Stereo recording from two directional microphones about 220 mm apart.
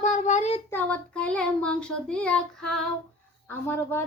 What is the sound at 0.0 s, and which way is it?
Child singing, 35° left (ahead or behind).